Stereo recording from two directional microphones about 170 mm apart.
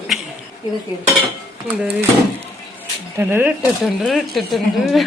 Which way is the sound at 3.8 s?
Centre (ahead or behind).